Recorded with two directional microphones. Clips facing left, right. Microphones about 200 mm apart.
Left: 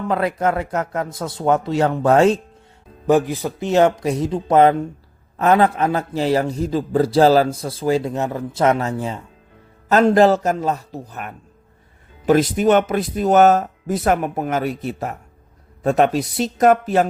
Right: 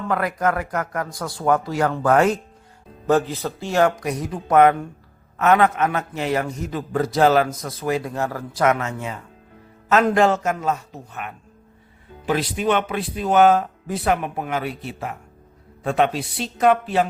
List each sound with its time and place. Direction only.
0.1 s a man's voice: 25° left (ahead or behind)
3.1 s a man's voice: 15° left (ahead or behind); by 17.1 s 45° left (ahead or behind)